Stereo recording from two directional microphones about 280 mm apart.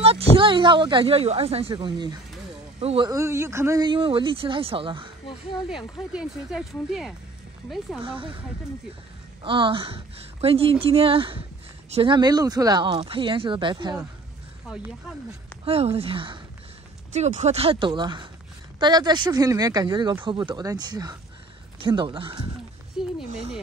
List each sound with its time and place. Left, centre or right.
0.0 s speech: centre
5.7 s speech: centre
8.0 s a woman's voice: centre
9.4 s a woman's voice: centre
14.7 s speech: centre
15.6 s a woman's voice: right
23.0 s a sound: centre